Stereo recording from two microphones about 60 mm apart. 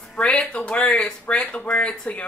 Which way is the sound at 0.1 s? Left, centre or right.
Centre.